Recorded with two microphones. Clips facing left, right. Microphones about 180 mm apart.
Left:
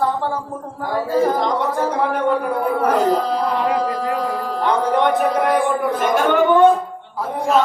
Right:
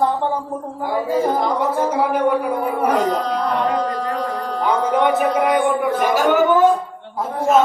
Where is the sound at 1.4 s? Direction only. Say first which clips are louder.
Right 1 dB; 5° right (ahead or behind).